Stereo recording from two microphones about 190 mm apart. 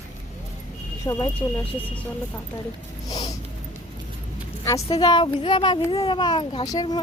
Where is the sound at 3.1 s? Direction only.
20° left (ahead or behind).